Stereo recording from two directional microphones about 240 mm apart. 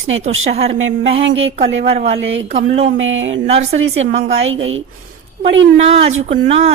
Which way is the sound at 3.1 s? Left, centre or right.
Right.